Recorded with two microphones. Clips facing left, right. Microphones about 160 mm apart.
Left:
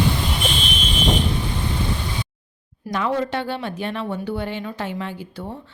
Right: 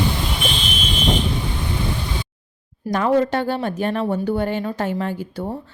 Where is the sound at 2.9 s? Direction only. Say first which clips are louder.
Right 5 dB; 45° right (ahead or behind).